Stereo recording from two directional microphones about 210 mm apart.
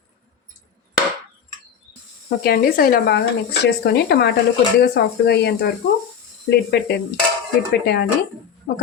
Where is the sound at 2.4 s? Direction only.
45° left (ahead or behind).